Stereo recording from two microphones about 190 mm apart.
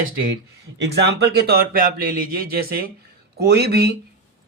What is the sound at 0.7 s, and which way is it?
Speech, 65° right (ahead or behind).